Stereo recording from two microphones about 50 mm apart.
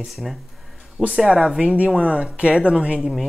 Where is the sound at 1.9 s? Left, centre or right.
Right.